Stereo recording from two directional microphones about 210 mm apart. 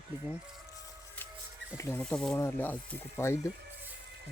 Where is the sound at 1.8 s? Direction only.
5° left (ahead or behind).